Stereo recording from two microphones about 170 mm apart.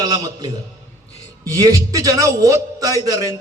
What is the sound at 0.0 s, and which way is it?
A man's voice, 25° right (ahead or behind).